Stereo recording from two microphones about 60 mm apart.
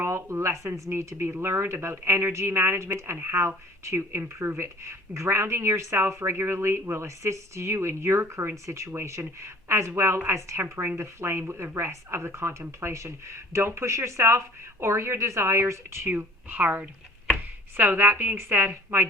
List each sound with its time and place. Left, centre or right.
0.0 s a woman's voice: right
16.0 s a woman's voice: right